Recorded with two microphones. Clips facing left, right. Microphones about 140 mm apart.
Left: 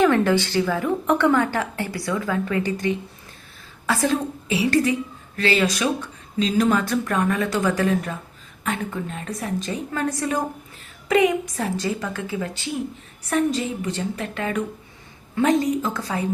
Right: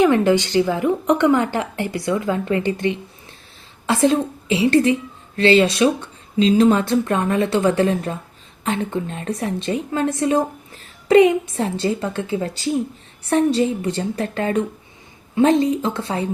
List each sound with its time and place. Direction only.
0.0 s a woman's voice: 15° right (ahead or behind)